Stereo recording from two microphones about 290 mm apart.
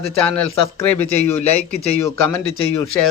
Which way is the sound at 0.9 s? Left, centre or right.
Centre.